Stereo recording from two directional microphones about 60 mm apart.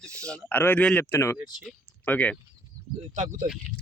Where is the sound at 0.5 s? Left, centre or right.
Left.